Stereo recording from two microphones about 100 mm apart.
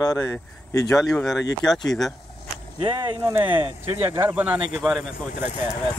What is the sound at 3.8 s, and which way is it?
Speech, 25° right (ahead or behind).